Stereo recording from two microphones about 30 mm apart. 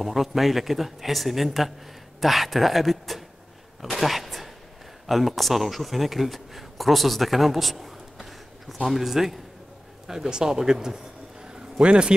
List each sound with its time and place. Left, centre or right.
0.0 s speech: centre
11.8 s a man's voice: right